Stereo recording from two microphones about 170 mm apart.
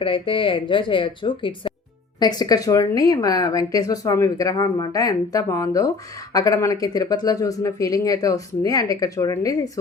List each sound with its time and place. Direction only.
0.0 s speech: 30° left (ahead or behind)